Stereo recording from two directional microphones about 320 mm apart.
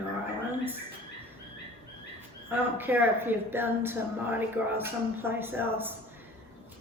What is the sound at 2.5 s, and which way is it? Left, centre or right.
A woman's voice, centre.